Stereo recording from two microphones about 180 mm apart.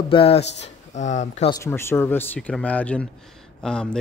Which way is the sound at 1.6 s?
15° left (ahead or behind).